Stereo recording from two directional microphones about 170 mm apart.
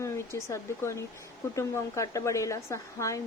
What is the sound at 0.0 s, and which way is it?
Speech, 15° left (ahead or behind).